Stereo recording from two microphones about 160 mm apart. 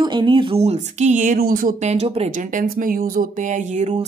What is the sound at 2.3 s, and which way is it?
A woman's voice, 55° right (ahead or behind).